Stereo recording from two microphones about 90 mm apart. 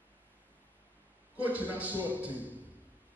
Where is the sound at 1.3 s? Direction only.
20° right (ahead or behind).